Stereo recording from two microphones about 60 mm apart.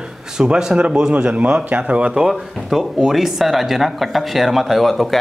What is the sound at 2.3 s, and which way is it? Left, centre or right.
Speech, centre.